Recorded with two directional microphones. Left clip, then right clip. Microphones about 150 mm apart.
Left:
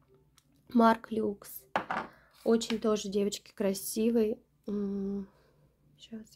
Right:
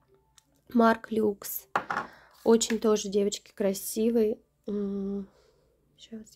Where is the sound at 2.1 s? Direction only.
35° right (ahead or behind).